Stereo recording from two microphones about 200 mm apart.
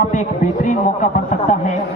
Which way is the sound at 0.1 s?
40° left (ahead or behind).